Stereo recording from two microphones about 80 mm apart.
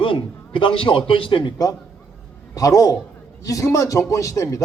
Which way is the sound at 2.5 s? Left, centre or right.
Left.